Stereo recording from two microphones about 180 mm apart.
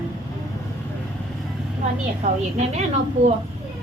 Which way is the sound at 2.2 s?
40° right (ahead or behind).